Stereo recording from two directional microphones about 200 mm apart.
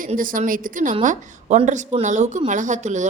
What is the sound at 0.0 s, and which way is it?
A woman's voice, 45° right (ahead or behind).